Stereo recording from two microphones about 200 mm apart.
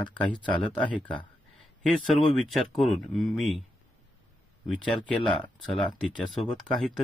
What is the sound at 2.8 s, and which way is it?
Speech, centre (ahead or behind).